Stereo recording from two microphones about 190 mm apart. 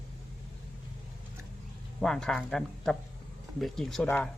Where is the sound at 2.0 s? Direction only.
Centre (ahead or behind).